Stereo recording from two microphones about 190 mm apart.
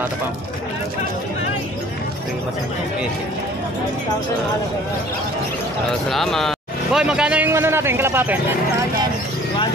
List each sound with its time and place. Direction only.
5.9 s a man's voice: centre (ahead or behind)